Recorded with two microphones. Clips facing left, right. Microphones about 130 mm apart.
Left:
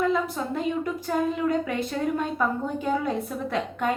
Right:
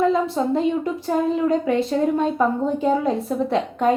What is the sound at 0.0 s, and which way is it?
A woman's voice, 30° right (ahead or behind).